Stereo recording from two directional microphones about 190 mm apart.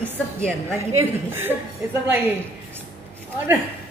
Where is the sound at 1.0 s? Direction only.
10° right (ahead or behind).